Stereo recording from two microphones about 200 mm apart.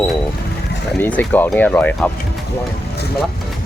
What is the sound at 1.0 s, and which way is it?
Speech, 10° left (ahead or behind).